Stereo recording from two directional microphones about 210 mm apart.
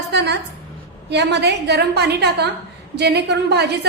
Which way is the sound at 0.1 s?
55° right (ahead or behind).